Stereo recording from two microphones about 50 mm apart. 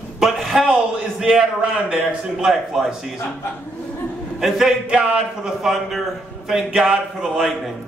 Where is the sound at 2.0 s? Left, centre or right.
Centre.